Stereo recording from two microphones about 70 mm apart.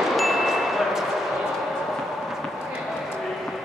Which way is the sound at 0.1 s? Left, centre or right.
Centre.